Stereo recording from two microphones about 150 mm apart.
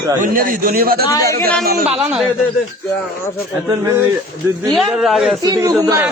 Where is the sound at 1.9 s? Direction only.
5° right (ahead or behind).